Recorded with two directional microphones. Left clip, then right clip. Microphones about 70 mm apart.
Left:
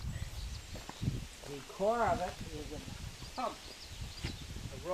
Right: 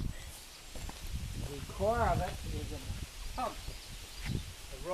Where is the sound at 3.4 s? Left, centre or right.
Right.